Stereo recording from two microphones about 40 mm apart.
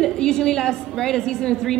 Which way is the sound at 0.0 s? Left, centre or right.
Centre.